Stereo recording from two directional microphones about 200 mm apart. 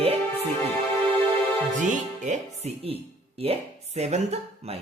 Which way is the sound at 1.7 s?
40° right (ahead or behind).